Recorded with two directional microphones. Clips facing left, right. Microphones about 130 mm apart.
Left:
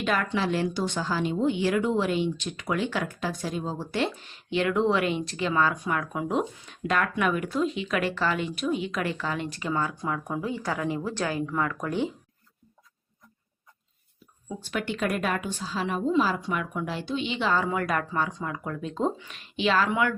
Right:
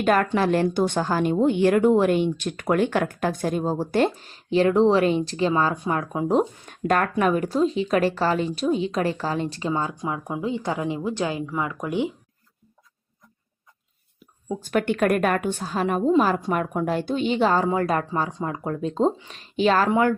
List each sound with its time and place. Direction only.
0.0 s a woman's voice: 50° right (ahead or behind); by 6.4 s 35° right (ahead or behind)
6.7 s speech: 45° right (ahead or behind); by 12.1 s 15° right (ahead or behind)
14.4 s a woman's voice: 40° right (ahead or behind)